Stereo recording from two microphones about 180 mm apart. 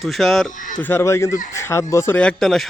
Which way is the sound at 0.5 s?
45° left (ahead or behind).